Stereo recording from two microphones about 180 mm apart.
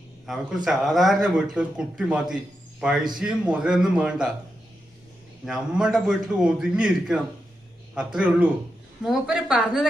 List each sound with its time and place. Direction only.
0.3 s speech: centre (ahead or behind)
5.5 s speech: 5° right (ahead or behind)